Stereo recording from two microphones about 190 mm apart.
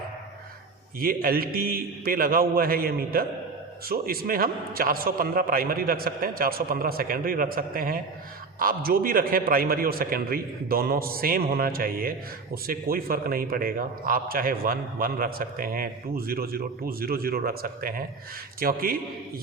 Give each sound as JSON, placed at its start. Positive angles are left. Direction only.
{"t": 0.9, "sound": "a man's voice", "side_deg": -50}